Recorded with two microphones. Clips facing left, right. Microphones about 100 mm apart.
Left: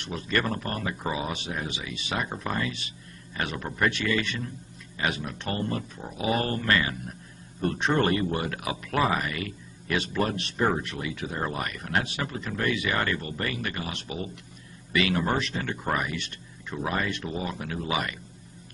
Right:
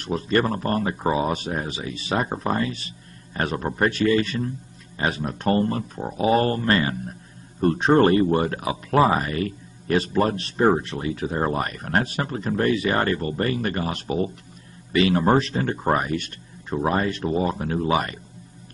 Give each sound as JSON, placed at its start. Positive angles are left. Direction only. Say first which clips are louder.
{"t": 0.0, "sound": "speech", "louder": "right 7 dB", "side_deg": -35}